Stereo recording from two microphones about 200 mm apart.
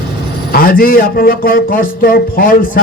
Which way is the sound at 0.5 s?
45° left (ahead or behind).